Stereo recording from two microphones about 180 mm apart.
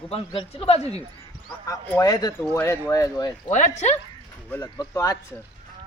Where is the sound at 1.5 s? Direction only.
20° left (ahead or behind).